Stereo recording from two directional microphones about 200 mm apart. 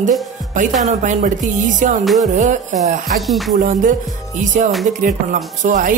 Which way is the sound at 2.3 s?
35° right (ahead or behind).